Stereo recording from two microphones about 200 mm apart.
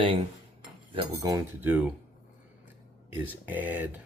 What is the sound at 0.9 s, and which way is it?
Cutlery, 15° right (ahead or behind).